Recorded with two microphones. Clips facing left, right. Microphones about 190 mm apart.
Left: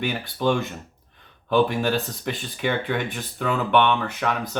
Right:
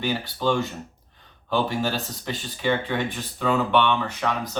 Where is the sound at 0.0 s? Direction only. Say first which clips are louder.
Left 1 dB; 55° left (ahead or behind).